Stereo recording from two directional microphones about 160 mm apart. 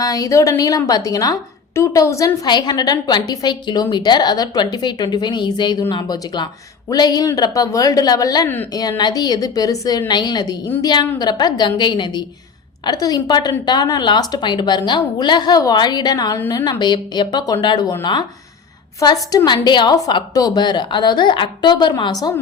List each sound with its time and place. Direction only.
0.0 s a woman's voice: 20° left (ahead or behind)